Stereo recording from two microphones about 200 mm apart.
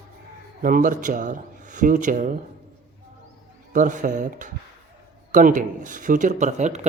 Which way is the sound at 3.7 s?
40° right (ahead or behind).